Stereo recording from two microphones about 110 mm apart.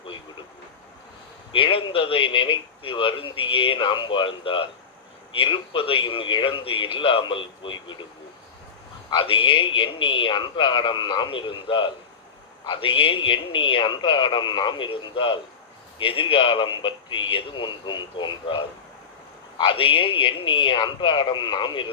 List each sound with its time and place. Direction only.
1.5 s a man's voice: 55° left (ahead or behind)
9.0 s a man's voice: 50° left (ahead or behind)